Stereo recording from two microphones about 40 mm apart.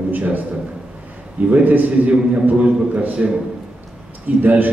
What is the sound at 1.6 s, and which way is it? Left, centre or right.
Speech, right.